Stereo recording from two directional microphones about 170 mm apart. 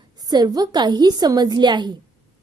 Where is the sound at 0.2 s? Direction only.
25° right (ahead or behind).